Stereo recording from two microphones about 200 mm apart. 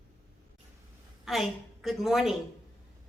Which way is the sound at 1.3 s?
Centre (ahead or behind).